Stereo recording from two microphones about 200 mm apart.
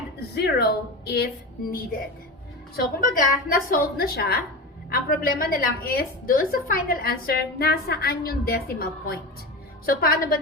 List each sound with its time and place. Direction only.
0.2 s a woman's voice: 55° left (ahead or behind)
2.7 s a woman's voice: 45° left (ahead or behind)